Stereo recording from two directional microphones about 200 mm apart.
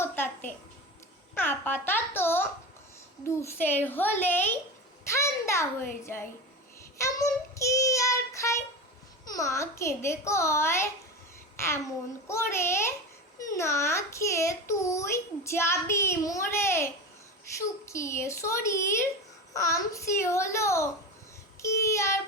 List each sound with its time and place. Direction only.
0.0 s a sound: 10° left (ahead or behind)
3.2 s a child's voice: 15° left (ahead or behind)
5.0 s a sound: 15° left (ahead or behind)
6.0 s a child's voice: 10° left (ahead or behind)
7.0 s child singing: 15° left (ahead or behind)
9.3 s a child's voice: 15° left (ahead or behind)
11.5 s a sound: 15° left (ahead or behind)
12.3 s a child's voice: 15° left (ahead or behind)
21.6 s child singing: 15° left (ahead or behind)